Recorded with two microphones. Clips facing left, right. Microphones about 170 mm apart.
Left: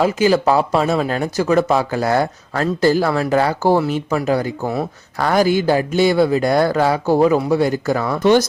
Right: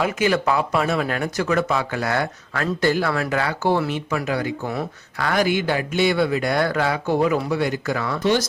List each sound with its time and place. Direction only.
0.0 s speech: 30° left (ahead or behind); by 8.4 s 50° left (ahead or behind)